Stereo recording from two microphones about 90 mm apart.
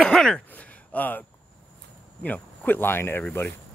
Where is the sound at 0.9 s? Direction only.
20° left (ahead or behind).